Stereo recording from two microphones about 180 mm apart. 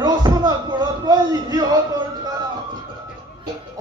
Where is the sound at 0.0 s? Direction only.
20° right (ahead or behind).